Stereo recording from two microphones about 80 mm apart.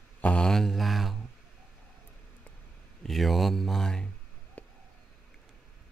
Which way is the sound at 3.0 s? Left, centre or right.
Centre.